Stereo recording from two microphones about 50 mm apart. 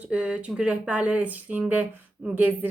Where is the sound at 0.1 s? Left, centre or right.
Right.